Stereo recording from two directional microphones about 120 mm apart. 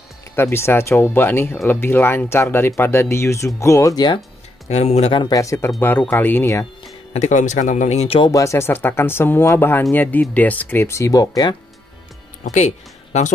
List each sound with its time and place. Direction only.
0.4 s speech: 20° left (ahead or behind)
4.6 s speech: 65° left (ahead or behind)
5.1 s speech: 40° left (ahead or behind)
5.4 s speech: 25° left (ahead or behind)
7.2 s speech: 85° left; by 8.2 s 65° left (ahead or behind)
8.3 s speech: 25° left (ahead or behind)
12.4 s speech: 75° left (ahead or behind)